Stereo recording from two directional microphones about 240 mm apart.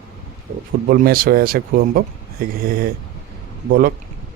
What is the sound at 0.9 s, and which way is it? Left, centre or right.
A man's voice, right.